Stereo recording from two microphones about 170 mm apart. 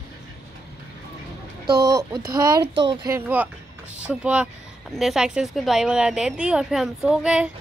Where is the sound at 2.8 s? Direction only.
15° right (ahead or behind).